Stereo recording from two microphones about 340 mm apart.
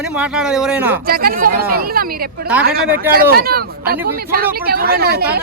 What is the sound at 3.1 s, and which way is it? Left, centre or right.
Speech, right.